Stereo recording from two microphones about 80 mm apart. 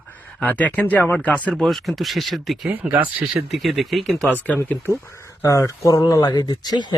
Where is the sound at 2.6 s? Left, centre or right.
Centre.